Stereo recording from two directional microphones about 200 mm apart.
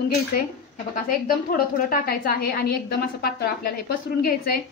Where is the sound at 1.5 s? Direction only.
45° left (ahead or behind).